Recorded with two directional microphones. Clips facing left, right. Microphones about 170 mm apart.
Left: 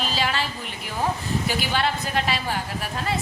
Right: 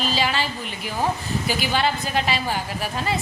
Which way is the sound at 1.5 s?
Centre (ahead or behind).